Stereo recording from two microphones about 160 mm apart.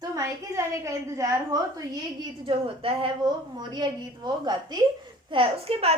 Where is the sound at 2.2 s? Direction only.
35° right (ahead or behind).